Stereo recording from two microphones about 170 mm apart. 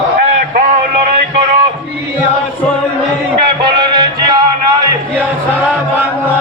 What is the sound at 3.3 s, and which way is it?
Music, 30° right (ahead or behind).